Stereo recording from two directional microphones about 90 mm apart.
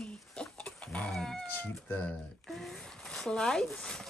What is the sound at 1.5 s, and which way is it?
Cat, 20° left (ahead or behind).